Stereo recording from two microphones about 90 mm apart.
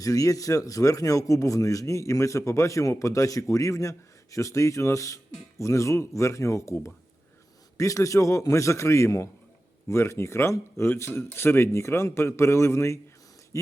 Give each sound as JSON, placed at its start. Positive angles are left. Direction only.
{"t": 0.0, "sound": "speech", "side_deg": 40}
{"t": 7.8, "sound": "speech", "side_deg": 35}